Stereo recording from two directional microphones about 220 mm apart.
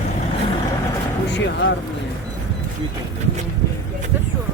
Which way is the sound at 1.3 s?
55° left (ahead or behind).